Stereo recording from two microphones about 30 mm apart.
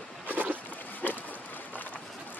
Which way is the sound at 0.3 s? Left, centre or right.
Right.